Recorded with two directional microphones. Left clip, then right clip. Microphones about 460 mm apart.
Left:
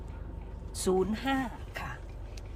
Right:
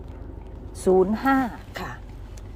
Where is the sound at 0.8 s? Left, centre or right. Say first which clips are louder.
Right 10 dB; centre.